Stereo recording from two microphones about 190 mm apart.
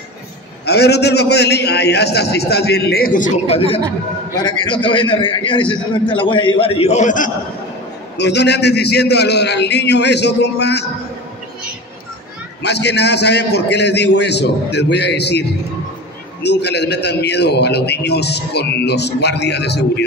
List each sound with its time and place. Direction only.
0.7 s a man's voice: 60° left (ahead or behind)
3.4 s a man's voice: 30° left (ahead or behind)
8.2 s a man's voice: 65° left (ahead or behind)
12.6 s a man's voice: 60° left (ahead or behind)
16.4 s a man's voice: 65° left (ahead or behind)